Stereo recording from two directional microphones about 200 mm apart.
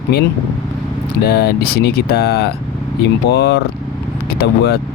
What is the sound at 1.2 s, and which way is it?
Speech, 50° left (ahead or behind).